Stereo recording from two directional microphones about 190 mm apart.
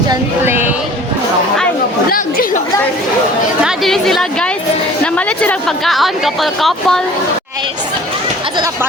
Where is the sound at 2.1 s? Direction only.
45° left (ahead or behind).